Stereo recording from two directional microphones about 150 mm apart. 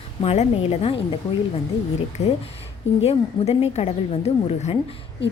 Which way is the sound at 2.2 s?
45° left (ahead or behind).